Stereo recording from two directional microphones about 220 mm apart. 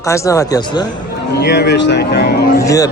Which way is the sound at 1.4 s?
50° left (ahead or behind).